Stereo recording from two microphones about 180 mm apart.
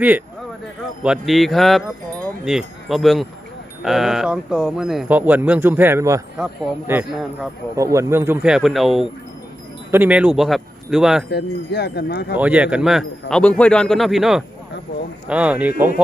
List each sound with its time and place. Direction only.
1.0 s speech: centre (ahead or behind)
11.3 s wind chime: 65° left (ahead or behind)
12.3 s speech: 10° right (ahead or behind)